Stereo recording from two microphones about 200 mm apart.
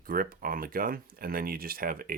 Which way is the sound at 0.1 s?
45° right (ahead or behind).